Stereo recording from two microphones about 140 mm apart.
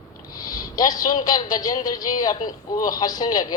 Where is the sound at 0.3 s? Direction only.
25° left (ahead or behind).